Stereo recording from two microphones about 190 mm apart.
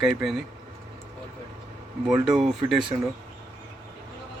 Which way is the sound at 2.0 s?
5° right (ahead or behind).